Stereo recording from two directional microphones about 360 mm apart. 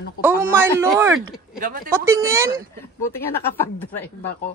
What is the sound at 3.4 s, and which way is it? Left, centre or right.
Speech, centre.